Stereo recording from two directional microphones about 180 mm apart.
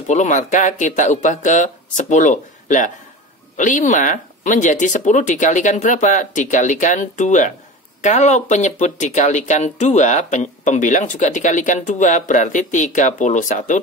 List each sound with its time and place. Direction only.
0.1 s speech: 45° left (ahead or behind)